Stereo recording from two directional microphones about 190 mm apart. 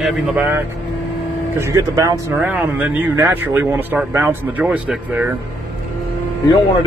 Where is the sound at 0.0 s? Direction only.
5° right (ahead or behind).